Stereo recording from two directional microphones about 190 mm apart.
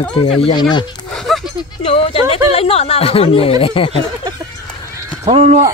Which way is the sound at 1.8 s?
30° left (ahead or behind).